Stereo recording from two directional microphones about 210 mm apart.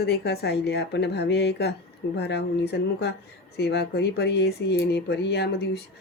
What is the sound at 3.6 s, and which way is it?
Speech, 50° left (ahead or behind).